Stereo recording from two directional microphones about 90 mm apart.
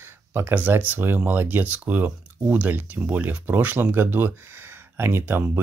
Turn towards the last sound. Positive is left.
turn(degrees=-25)  # may be behind; listen again after turning